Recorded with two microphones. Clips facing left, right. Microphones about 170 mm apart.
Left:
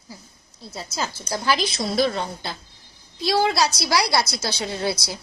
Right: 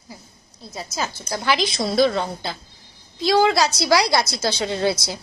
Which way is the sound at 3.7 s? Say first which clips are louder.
Right 4 dB; 25° right (ahead or behind).